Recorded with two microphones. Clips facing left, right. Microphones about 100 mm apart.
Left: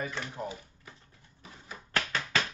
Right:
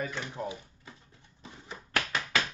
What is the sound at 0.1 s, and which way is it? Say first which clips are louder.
Speech: right 1 dB; 15° right (ahead or behind).